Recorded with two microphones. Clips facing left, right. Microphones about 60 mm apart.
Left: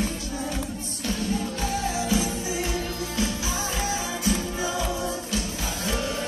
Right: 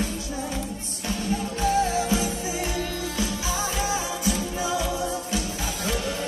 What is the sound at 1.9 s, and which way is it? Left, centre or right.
Music, right.